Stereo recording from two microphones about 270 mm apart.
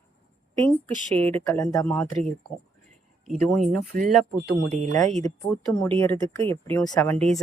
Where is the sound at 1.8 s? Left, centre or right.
Centre.